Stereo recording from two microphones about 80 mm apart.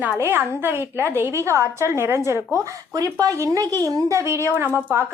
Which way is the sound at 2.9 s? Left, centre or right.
Right.